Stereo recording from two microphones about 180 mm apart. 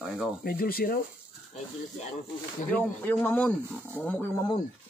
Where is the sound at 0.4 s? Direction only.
55° left (ahead or behind).